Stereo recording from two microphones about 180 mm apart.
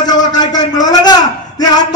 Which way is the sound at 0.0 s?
20° left (ahead or behind).